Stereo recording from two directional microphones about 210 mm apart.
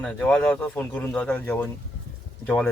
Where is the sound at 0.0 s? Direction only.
5° left (ahead or behind).